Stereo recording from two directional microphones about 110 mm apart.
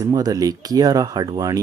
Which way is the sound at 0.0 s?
35° right (ahead or behind).